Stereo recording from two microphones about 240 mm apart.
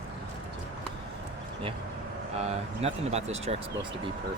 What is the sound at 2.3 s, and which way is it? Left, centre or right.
Speech, right.